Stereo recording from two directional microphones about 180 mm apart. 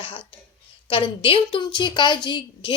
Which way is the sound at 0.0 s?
30° left (ahead or behind).